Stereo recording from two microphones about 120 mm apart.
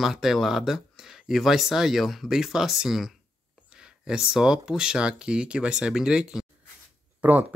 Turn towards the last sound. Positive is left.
turn(degrees=-15)  # may be behind; listen again after turning